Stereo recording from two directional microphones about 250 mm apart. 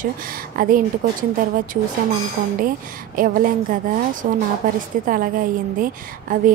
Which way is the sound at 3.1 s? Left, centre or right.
Right.